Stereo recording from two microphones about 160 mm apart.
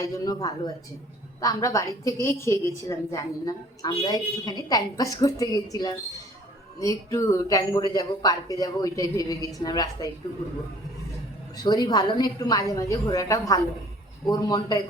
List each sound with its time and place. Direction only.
0.0 s a woman's voice: 20° left (ahead or behind)
11.5 s a woman's voice: 25° left (ahead or behind)